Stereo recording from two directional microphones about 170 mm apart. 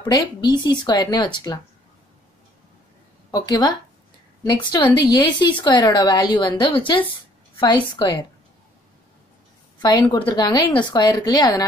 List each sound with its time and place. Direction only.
0.0 s speech: 25° left (ahead or behind)
3.3 s speech: 25° left (ahead or behind)
9.8 s speech: 25° left (ahead or behind)